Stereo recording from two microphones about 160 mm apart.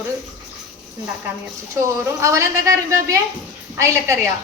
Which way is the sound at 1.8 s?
20° right (ahead or behind).